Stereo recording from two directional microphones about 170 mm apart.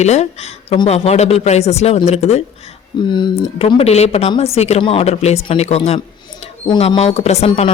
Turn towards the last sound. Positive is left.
turn(degrees=35)  # may be behind; listen again after turning